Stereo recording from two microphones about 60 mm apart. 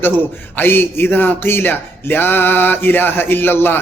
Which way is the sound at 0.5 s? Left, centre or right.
Left.